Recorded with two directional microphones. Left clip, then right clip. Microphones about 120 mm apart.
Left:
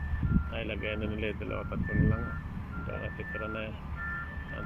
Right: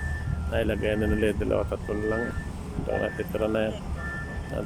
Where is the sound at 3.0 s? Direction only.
70° right (ahead or behind).